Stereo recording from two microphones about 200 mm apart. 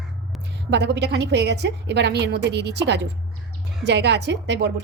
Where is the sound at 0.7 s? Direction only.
60° right (ahead or behind).